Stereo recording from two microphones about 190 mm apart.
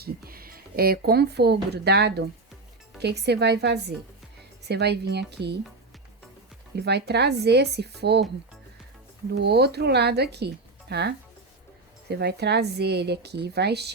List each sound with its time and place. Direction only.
0.0 s speech: 50° right (ahead or behind)
6.8 s speech: 60° right (ahead or behind)
9.4 s speech: 60° right (ahead or behind)